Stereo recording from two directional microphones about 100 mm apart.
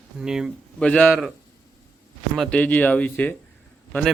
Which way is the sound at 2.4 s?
10° left (ahead or behind).